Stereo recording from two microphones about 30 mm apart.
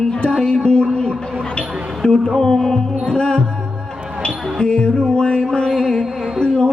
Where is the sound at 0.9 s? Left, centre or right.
Left.